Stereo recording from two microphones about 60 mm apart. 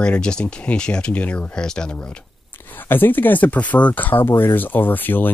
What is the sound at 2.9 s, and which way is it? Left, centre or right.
Speech, left.